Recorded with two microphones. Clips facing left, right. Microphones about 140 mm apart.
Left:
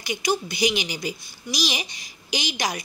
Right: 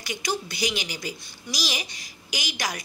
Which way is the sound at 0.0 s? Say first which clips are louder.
Left 5 dB; 15° left (ahead or behind).